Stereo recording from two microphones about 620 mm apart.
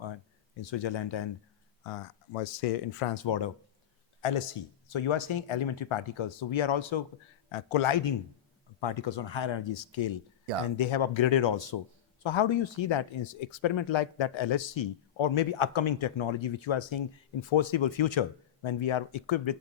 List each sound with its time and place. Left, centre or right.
0.6 s speech: left
1.8 s speech: left
3.2 s speech: left